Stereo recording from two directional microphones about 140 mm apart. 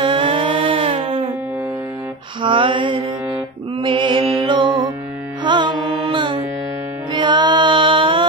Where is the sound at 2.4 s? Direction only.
40° right (ahead or behind).